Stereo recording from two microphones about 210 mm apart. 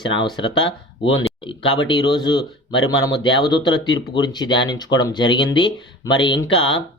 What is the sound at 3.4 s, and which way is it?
Speech, 20° left (ahead or behind).